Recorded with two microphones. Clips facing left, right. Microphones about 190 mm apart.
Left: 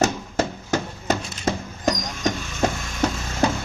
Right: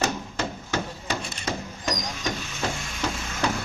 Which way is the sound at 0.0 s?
45° left (ahead or behind).